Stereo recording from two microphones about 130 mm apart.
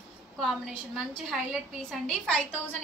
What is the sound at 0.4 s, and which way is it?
A woman's voice, centre (ahead or behind).